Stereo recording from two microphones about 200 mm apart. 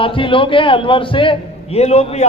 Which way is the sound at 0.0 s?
25° left (ahead or behind).